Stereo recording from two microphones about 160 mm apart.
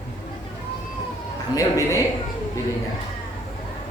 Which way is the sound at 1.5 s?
20° left (ahead or behind).